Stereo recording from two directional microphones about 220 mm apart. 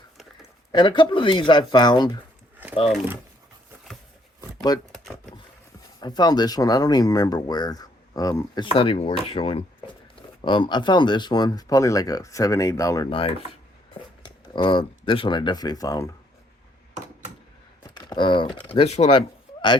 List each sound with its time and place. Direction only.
0.7 s speech: 20° left (ahead or behind)
4.7 s speech: 15° left (ahead or behind)
6.0 s speech: 20° left (ahead or behind)
17.8 s speech: 20° left (ahead or behind)